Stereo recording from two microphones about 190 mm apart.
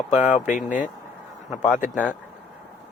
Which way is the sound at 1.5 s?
Centre (ahead or behind).